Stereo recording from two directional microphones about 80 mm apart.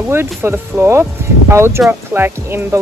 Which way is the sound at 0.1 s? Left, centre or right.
Right.